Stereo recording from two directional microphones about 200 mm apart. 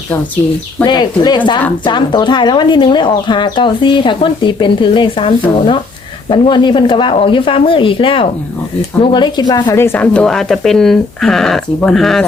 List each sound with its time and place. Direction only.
0.9 s speech: 20° left (ahead or behind)
6.3 s a woman's voice: 25° left (ahead or behind); by 12.2 s centre (ahead or behind)